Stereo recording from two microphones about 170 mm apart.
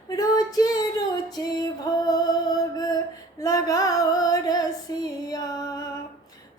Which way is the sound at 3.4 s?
20° left (ahead or behind).